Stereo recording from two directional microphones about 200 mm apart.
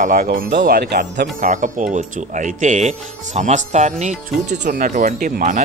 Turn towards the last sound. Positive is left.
turn(degrees=-35)  # may be behind; listen again after turning